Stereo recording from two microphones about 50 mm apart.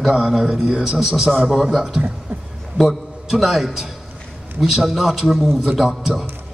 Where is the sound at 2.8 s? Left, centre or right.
Centre.